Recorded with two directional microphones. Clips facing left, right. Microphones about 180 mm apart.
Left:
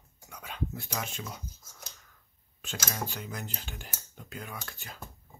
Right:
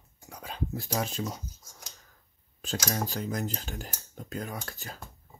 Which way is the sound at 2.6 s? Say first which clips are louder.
Right 5 dB; 35° right (ahead or behind).